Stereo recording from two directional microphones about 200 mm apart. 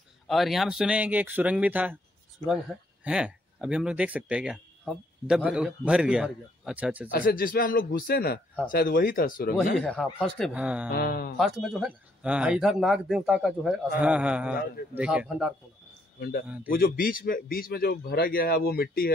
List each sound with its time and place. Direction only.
0.3 s speech: centre (ahead or behind)
7.1 s a man's voice: 45° left (ahead or behind)
9.8 s speech: 5° left (ahead or behind)
10.9 s a man's voice: 50° left (ahead or behind)
11.3 s speech: centre (ahead or behind)
16.2 s a man's voice: 50° left (ahead or behind)